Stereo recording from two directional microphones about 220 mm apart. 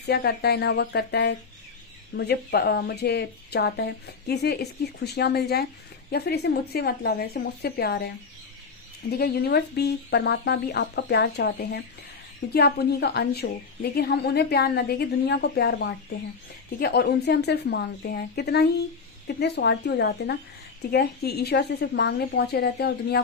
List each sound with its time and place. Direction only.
0.1 s speech: 45° left (ahead or behind)
9.1 s speech: 45° left (ahead or behind)